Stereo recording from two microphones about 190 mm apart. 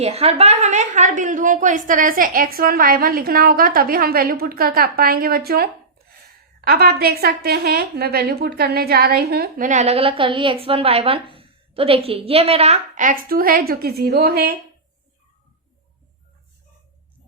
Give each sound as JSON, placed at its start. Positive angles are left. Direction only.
{"t": 0.0, "sound": "a woman's voice", "side_deg": -35}
{"t": 6.7, "sound": "a woman's voice", "side_deg": -55}